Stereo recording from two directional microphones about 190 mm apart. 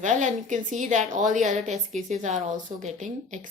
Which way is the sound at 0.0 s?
40° right (ahead or behind).